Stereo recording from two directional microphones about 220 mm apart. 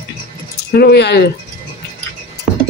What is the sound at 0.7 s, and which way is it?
Speech, 45° left (ahead or behind).